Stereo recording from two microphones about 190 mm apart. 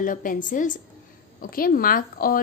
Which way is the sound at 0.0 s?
45° left (ahead or behind).